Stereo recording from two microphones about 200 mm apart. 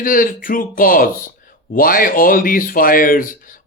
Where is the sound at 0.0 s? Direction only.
45° left (ahead or behind).